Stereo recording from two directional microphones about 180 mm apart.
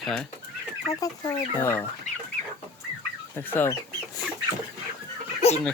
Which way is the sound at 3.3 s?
10° left (ahead or behind).